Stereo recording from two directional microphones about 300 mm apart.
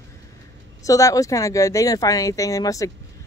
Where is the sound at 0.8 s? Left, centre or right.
Centre.